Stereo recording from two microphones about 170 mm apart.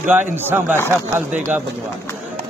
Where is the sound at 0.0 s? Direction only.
10° right (ahead or behind).